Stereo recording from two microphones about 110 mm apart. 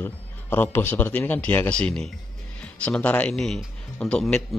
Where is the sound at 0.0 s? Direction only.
20° left (ahead or behind).